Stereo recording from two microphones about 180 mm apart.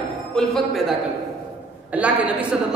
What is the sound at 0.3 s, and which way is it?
Speech, centre (ahead or behind).